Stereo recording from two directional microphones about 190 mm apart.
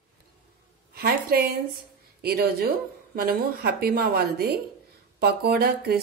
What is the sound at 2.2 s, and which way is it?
A woman's voice, 55° right (ahead or behind).